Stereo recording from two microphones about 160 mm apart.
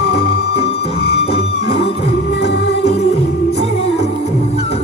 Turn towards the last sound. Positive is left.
turn(degrees=90)